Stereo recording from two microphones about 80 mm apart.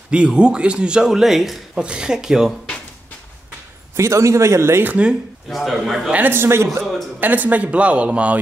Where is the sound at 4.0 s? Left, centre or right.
Right.